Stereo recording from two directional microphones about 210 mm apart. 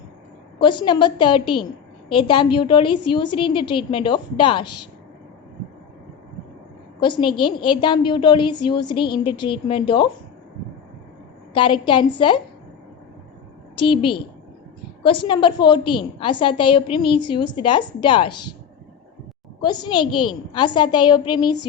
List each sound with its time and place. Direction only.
0.6 s a woman's voice: 20° left (ahead or behind)
7.2 s a woman's voice: 25° left (ahead or behind)
11.5 s a woman's voice: 25° left (ahead or behind)
13.7 s a woman's voice: 25° left (ahead or behind)
19.6 s a woman's voice: 20° left (ahead or behind)